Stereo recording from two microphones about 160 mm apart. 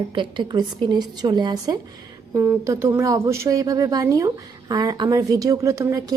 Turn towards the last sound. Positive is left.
turn(degrees=-20)  # may be behind; listen again after turning